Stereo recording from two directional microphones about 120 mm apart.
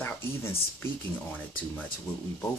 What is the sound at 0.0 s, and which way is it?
Speech, 20° left (ahead or behind).